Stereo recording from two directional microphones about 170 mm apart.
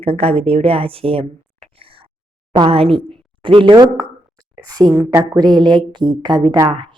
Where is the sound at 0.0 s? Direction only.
35° right (ahead or behind).